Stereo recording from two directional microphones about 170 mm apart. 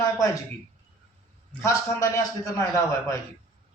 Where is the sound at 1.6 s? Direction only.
15° left (ahead or behind).